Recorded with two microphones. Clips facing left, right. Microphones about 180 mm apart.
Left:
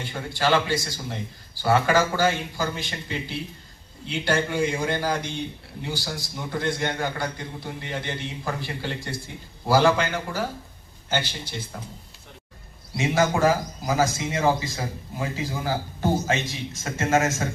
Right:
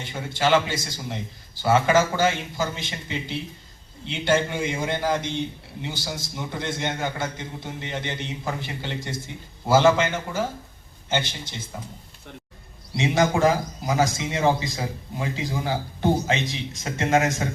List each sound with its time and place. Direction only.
0.3 s a man's voice: 20° right (ahead or behind)
12.9 s speech: 20° right (ahead or behind)